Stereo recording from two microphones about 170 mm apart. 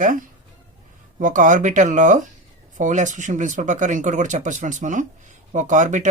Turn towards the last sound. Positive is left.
turn(degrees=-45)  # may be behind; listen again after turning